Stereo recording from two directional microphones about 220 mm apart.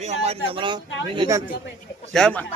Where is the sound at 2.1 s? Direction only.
5° left (ahead or behind).